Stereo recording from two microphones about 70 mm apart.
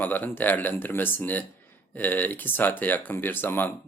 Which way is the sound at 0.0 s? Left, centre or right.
Left.